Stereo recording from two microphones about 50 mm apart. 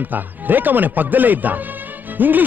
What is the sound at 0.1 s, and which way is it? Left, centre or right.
Speech, right.